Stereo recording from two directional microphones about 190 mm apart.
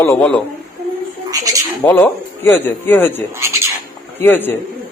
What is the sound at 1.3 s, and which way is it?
Speech, 20° right (ahead or behind).